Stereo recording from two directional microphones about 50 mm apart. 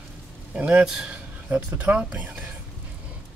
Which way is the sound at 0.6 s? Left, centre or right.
Right.